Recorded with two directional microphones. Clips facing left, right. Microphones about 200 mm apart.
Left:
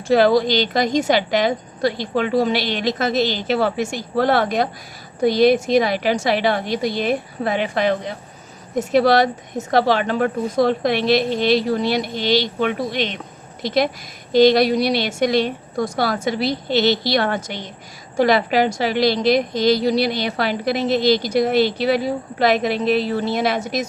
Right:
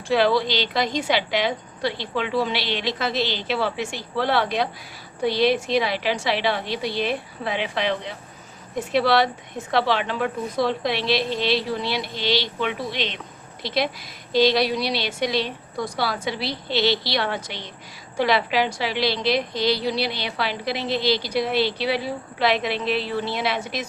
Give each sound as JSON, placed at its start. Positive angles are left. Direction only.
{"t": 0.1, "sound": "a woman's voice", "side_deg": 45}